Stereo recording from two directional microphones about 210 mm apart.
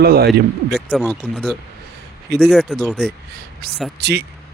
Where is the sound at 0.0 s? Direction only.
45° right (ahead or behind).